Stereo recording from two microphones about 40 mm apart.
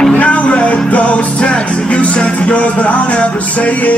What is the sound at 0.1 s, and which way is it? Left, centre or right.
Music, left.